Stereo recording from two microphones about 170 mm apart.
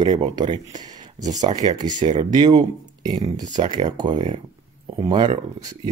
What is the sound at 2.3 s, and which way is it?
Speech, 25° right (ahead or behind).